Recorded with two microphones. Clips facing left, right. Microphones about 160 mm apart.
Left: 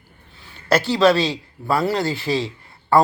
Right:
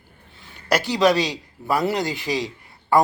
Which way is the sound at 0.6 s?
15° right (ahead or behind).